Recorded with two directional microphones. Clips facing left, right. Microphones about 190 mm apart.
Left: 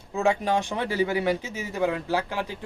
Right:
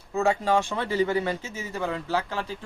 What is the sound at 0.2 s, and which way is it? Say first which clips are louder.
A man's voice: right 1 dB; 15° left (ahead or behind).